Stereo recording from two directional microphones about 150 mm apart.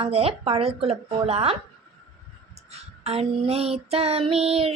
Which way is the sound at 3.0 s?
40° right (ahead or behind).